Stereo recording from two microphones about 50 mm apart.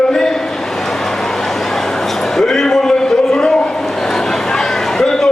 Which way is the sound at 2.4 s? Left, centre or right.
Centre.